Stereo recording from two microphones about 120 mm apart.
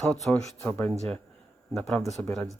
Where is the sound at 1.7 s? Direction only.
5° left (ahead or behind).